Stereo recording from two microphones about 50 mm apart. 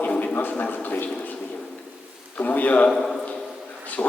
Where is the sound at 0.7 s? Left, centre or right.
Left.